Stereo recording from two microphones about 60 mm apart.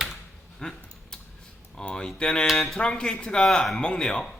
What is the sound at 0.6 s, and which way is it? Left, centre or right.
Dog, centre.